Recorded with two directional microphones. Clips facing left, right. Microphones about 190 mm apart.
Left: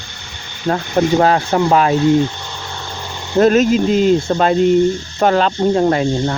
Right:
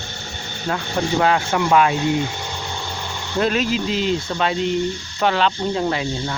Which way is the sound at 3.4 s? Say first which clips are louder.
Left 9 dB; 45° left (ahead or behind).